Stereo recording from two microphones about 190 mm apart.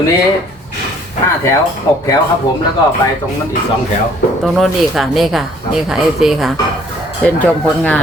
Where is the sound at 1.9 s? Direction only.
15° left (ahead or behind).